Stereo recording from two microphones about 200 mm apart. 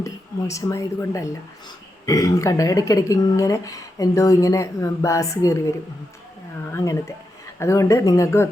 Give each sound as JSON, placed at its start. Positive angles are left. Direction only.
{"t": 0.0, "sound": "speech", "side_deg": 15}
{"t": 6.7, "sound": "speech", "side_deg": 15}